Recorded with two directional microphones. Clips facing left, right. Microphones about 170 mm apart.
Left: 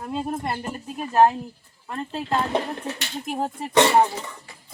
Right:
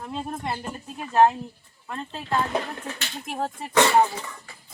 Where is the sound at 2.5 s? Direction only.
25° left (ahead or behind).